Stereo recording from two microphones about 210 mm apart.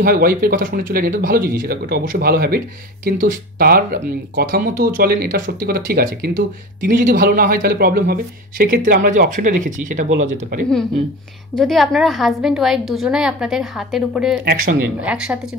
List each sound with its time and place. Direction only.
0.0 s speech: 45° right (ahead or behind)
11.5 s a woman's voice: centre (ahead or behind)
14.4 s speech: 45° right (ahead or behind)
14.8 s a woman's voice: 5° right (ahead or behind)